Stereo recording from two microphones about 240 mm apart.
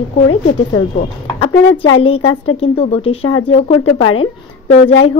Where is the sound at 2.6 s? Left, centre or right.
Left.